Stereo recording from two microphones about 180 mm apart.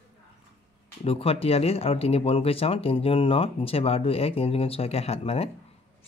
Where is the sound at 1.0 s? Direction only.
35° left (ahead or behind).